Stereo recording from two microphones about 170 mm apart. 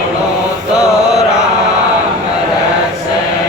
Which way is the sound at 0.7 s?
5° right (ahead or behind).